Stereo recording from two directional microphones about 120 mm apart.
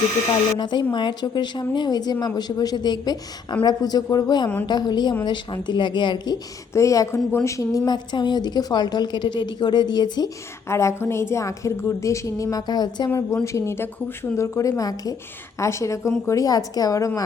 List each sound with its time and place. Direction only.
0.6 s speech: 40° left (ahead or behind)
6.7 s a woman's voice: 25° left (ahead or behind)
10.7 s a woman's voice: 25° left (ahead or behind)
13.1 s a woman's voice: 25° left (ahead or behind)